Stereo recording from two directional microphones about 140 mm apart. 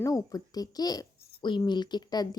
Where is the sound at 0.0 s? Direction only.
25° left (ahead or behind).